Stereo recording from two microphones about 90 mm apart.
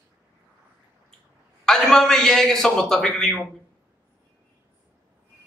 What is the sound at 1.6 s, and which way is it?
A man's voice, 5° left (ahead or behind).